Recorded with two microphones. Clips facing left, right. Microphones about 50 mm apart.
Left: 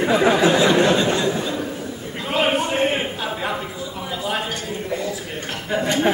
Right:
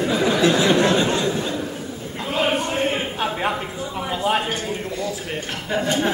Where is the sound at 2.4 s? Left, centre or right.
Left.